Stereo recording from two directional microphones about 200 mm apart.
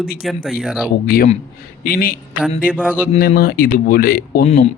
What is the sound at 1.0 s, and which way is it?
A man's voice, 45° left (ahead or behind).